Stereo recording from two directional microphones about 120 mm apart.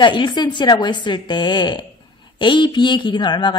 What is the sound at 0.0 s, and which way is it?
Speech, 40° left (ahead or behind).